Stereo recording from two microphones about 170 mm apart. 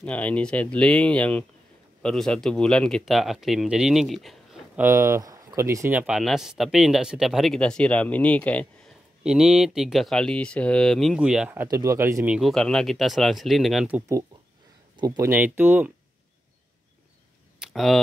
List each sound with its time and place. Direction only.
0.0 s speech: 10° left (ahead or behind)
4.8 s speech: 15° right (ahead or behind); by 8.6 s 10° left (ahead or behind)
9.2 s speech: 5° right (ahead or behind)
11.6 s speech: 20° right (ahead or behind)
12.4 s speech: centre (ahead or behind)
17.6 s a sound: centre (ahead or behind)